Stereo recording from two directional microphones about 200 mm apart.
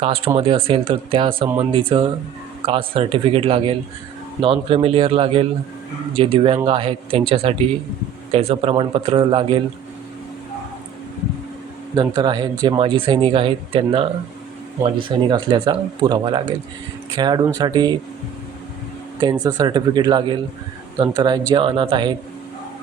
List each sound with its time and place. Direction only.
0.0 s speech: 30° right (ahead or behind)
11.9 s speech: 20° right (ahead or behind)
15.3 s speech: 20° right (ahead or behind)
19.2 s speech: 20° right (ahead or behind)